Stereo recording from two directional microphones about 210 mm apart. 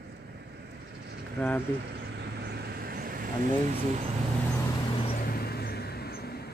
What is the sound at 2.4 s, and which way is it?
Vehicle, 50° right (ahead or behind).